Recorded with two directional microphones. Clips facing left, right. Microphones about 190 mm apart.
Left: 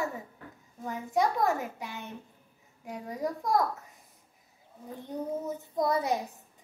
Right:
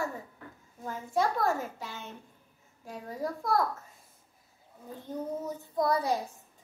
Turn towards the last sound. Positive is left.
turn(degrees=20)  # may be behind; listen again after turning